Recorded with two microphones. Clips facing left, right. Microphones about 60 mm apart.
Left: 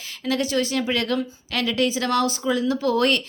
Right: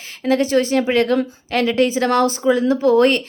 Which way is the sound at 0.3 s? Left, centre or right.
Right.